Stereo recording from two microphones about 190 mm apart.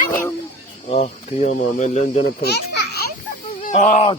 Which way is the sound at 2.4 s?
60° left (ahead or behind).